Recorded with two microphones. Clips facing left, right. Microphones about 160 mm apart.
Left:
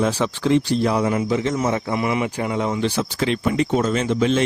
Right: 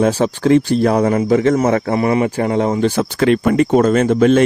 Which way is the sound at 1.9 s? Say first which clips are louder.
Right 7 dB; 45° right (ahead or behind).